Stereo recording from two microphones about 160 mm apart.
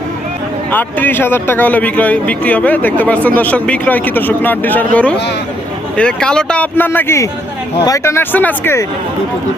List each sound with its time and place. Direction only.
0.7 s speech: 10° left (ahead or behind)
6.0 s speech: 5° left (ahead or behind)